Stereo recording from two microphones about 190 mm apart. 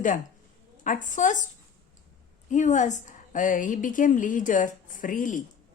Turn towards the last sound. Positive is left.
turn(degrees=45)  # may be behind; listen again after turning